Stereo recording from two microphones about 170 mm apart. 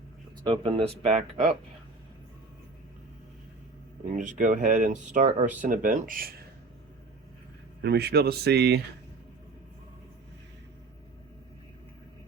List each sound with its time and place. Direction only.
0.4 s speech: 30° right (ahead or behind)
4.1 s speech: 45° right (ahead or behind)
7.8 s speech: 70° right (ahead or behind)